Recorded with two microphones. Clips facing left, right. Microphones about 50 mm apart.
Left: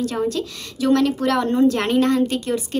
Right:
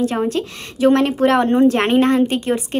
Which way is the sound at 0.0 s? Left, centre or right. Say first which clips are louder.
Right 3 dB; right.